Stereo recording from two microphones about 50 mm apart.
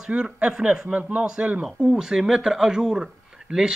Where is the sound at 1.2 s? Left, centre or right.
Centre.